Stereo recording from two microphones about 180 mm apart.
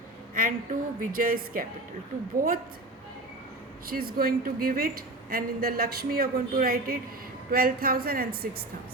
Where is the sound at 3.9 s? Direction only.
55° right (ahead or behind).